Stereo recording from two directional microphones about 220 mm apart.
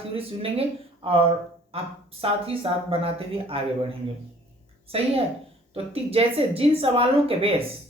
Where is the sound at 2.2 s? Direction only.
25° right (ahead or behind).